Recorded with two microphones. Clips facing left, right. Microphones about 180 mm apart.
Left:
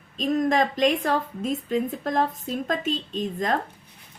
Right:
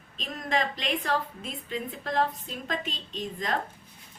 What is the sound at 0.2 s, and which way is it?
A woman's voice, 45° left (ahead or behind).